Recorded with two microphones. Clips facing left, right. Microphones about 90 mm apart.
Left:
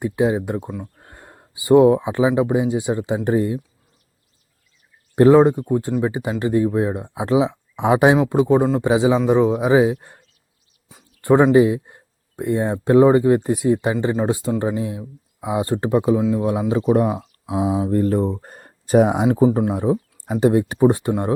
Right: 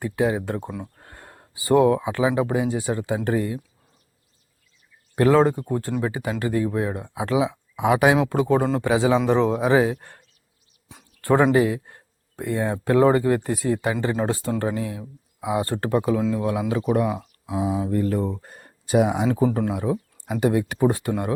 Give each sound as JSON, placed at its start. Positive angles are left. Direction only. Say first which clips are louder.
{"t": 0.0, "sound": "speech", "louder": "left 3 dB", "side_deg": 20}
{"t": 0.7, "sound": "speech", "louder": "left 2 dB", "side_deg": 0}
{"t": 1.0, "sound": "speech", "louder": "left 1 dB", "side_deg": 15}
{"t": 5.1, "sound": "speech", "louder": "left 5 dB", "side_deg": 25}
{"t": 11.2, "sound": "speech", "louder": "left 5 dB", "side_deg": 20}
{"t": 17.1, "sound": "a sound", "louder": "left 3 dB", "side_deg": 15}
{"t": 17.8, "sound": "speech", "louder": "left 5 dB", "side_deg": 35}
{"t": 19.3, "sound": "speech", "louder": "left 5 dB", "side_deg": 25}